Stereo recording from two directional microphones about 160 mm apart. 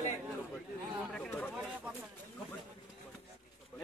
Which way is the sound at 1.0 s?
5° left (ahead or behind).